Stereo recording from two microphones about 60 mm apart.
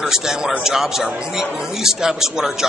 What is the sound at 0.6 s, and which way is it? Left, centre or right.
Speech, centre.